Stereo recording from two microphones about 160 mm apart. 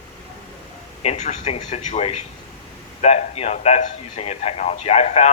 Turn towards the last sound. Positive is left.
turn(degrees=45)  # may be behind; listen again after turning